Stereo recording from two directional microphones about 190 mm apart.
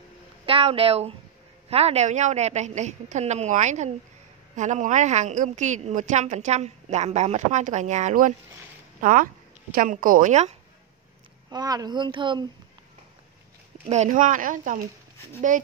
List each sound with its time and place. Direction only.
0.5 s a woman's voice: 30° right (ahead or behind)
11.5 s speech: 20° right (ahead or behind)
13.8 s speech: 40° right (ahead or behind)